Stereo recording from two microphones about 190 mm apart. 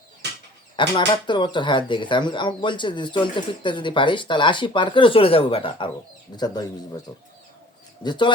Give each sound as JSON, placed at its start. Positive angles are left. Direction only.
{"t": 0.8, "sound": "speech", "side_deg": 25}
{"t": 8.0, "sound": "speech", "side_deg": 25}